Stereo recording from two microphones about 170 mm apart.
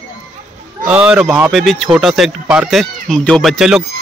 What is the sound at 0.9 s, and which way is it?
Speech, 10° right (ahead or behind).